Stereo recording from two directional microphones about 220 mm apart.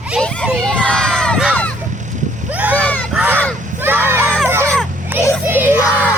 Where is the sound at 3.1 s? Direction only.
10° right (ahead or behind).